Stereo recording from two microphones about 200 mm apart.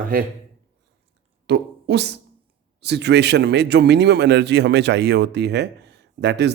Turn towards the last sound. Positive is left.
turn(degrees=-60)  # may be behind; listen again after turning